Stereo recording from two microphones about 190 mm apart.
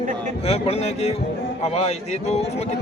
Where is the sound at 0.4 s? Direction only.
30° left (ahead or behind).